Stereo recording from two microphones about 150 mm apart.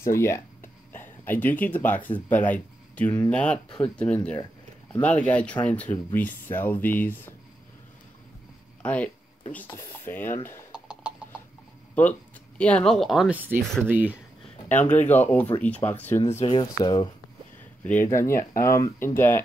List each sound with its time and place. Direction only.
0.0 s speech: 20° left (ahead or behind)
8.8 s speech: 10° left (ahead or behind)
10.7 s a sound: 5° right (ahead or behind)
11.9 s speech: 10° left (ahead or behind)
13.4 s speech: 15° right (ahead or behind)
14.7 s speech: 10° left (ahead or behind)
16.4 s speech: 30° left (ahead or behind)
17.8 s speech: 15° left (ahead or behind)